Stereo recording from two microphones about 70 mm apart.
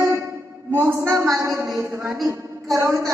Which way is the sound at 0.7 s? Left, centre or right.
Right.